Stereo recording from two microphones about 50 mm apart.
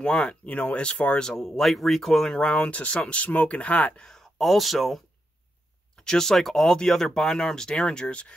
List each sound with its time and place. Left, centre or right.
0.0 s speech: centre
1.2 s speech: centre
2.5 s speech: left
4.0 s speech: centre
5.9 s speech: centre